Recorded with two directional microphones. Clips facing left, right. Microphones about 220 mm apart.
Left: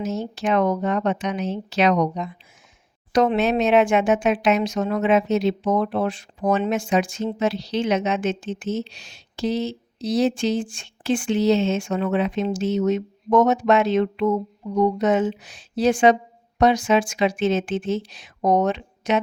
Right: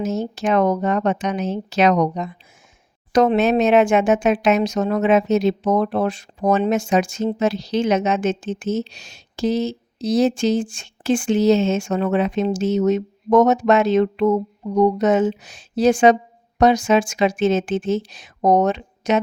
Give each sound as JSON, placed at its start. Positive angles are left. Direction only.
{"t": 0.0, "sound": "speech", "side_deg": -45}